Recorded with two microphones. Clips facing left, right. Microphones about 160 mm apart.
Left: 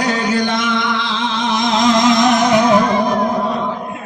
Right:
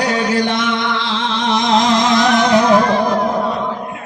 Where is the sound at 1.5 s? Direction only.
30° right (ahead or behind).